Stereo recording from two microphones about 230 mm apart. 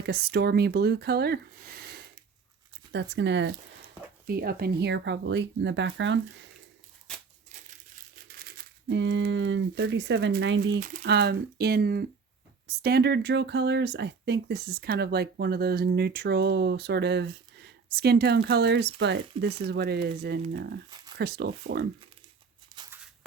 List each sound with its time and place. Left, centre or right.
0.0 s speech: right
7.5 s crumpling: right
10.8 s speech: right
22.7 s scissors: centre